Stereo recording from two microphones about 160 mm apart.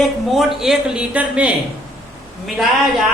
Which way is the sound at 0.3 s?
Centre (ahead or behind).